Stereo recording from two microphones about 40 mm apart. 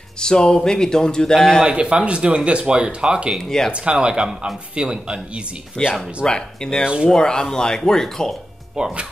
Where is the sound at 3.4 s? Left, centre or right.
Centre.